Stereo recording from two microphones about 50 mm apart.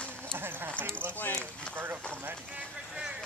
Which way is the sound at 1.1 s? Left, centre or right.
Left.